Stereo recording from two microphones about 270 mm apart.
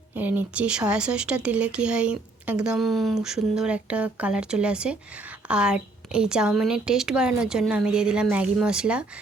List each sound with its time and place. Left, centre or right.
0.2 s speech: centre